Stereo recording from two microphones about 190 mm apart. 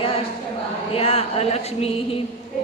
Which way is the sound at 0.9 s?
30° left (ahead or behind).